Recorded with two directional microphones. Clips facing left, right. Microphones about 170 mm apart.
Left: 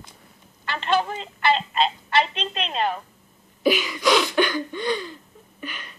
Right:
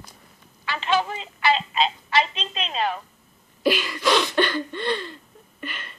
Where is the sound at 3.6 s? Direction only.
Centre (ahead or behind).